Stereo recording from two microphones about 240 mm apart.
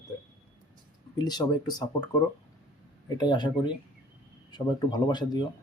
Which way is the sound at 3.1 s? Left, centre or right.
Centre.